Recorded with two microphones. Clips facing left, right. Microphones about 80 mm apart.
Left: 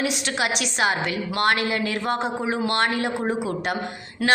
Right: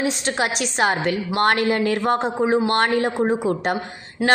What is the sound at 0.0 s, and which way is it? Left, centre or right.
A woman's voice, right.